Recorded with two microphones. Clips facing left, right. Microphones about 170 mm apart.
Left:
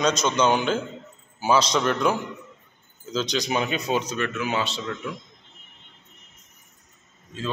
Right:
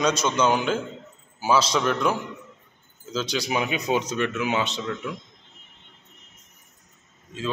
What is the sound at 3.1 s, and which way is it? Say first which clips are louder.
A man's voice: left 1 dB; 5° right (ahead or behind).